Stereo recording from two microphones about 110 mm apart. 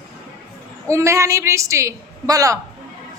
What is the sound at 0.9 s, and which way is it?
A woman's voice, 30° right (ahead or behind).